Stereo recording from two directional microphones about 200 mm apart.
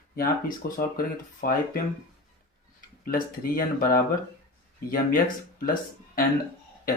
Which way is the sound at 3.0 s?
45° left (ahead or behind).